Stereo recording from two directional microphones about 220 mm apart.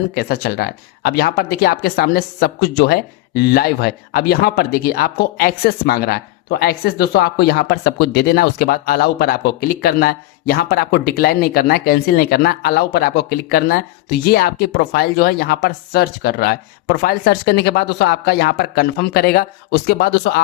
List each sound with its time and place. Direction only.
0.1 s speech: 45° left (ahead or behind)